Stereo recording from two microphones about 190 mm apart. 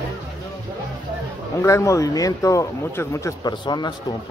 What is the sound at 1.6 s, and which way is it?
Speech, 15° left (ahead or behind).